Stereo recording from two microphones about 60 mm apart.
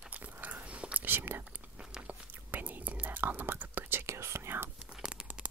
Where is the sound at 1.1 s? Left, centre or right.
Right.